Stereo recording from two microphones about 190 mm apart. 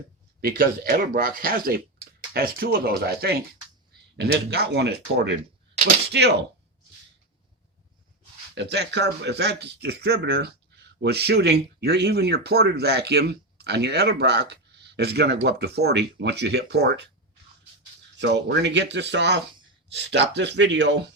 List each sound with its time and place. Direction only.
0.4 s speech: 50° right (ahead or behind)
8.5 s speech: 65° right (ahead or behind)
18.2 s speech: 65° right (ahead or behind)